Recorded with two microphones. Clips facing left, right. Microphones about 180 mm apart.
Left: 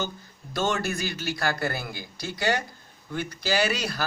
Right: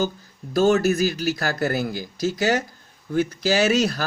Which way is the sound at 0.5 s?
40° right (ahead or behind).